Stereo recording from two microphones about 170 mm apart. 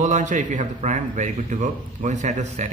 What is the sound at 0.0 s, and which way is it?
Speech, 45° right (ahead or behind).